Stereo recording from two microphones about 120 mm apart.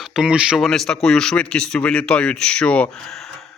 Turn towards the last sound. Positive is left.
turn(degrees=5)  # may be behind; listen again after turning